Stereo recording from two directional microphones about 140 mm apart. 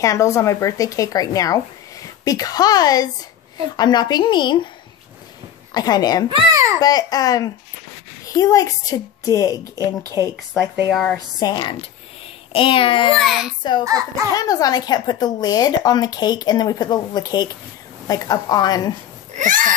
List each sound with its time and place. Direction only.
0.0 s a woman's voice: 20° left (ahead or behind)
5.7 s a woman's voice: 30° left (ahead or behind)
6.5 s a sound: 20° right (ahead or behind)
6.8 s a woman's voice: 30° left (ahead or behind)
10.9 s speech: centre (ahead or behind)
11.3 s a woman's voice: 30° left (ahead or behind)
13.2 s speech: centre (ahead or behind)
13.8 s a child's voice: 25° right (ahead or behind)
14.3 s a woman's voice: 25° left (ahead or behind)
19.3 s a sound: 70° right (ahead or behind)